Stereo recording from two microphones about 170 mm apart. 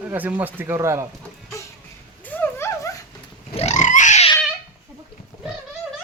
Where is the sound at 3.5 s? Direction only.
40° left (ahead or behind).